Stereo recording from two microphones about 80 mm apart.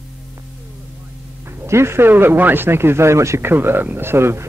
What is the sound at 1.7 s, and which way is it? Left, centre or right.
A man's voice, right.